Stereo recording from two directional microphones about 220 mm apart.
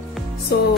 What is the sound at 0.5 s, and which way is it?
Music, 45° left (ahead or behind).